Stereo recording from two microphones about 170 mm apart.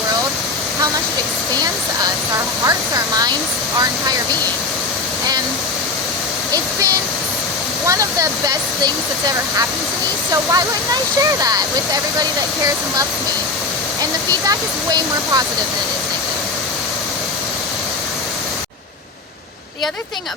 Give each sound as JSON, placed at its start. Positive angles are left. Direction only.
{"t": 2.6, "sound": "speech", "side_deg": -20}
{"t": 7.9, "sound": "speech", "side_deg": -20}
{"t": 14.0, "sound": "speech", "side_deg": -20}